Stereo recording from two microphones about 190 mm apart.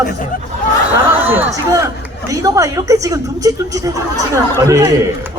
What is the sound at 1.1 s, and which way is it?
Speech, 10° right (ahead or behind).